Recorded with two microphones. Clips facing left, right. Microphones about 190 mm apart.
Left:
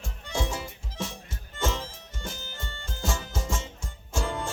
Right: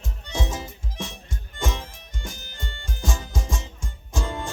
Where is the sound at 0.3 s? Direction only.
20° right (ahead or behind).